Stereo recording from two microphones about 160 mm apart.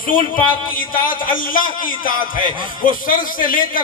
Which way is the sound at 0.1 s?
60° left (ahead or behind).